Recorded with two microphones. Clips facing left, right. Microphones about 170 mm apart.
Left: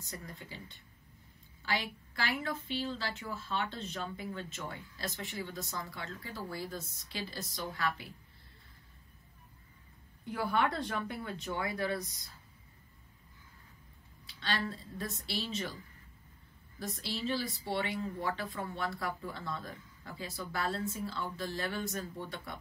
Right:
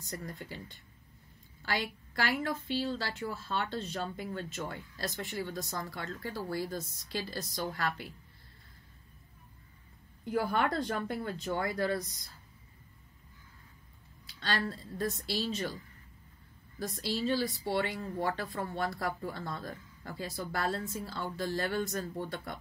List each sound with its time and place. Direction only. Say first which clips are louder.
2.2 s speech: right 3 dB; 40° right (ahead or behind)
10.3 s speech: right 2 dB; 45° right (ahead or behind)
14.4 s a woman's voice: right 2 dB; 45° right (ahead or behind)
16.9 s a woman's voice: right 4 dB; 45° right (ahead or behind)